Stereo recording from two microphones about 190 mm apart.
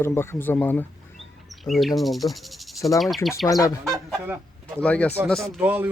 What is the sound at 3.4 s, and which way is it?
Speech, 20° left (ahead or behind).